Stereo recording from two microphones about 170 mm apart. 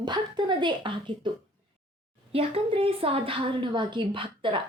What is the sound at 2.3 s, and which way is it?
A woman's voice, 35° right (ahead or behind).